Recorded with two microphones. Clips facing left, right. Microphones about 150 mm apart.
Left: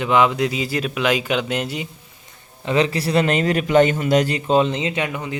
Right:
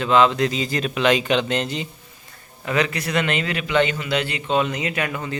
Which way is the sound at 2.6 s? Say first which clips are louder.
Left 4 dB; 30° left (ahead or behind).